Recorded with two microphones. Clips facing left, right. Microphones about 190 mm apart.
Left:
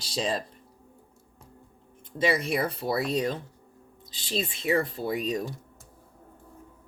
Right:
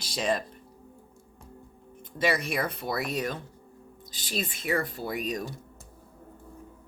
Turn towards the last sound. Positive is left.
turn(degrees=30)  # may be behind; listen again after turning